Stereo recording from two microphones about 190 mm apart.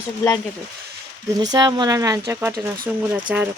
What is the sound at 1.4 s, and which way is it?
A woman's voice, 20° right (ahead or behind).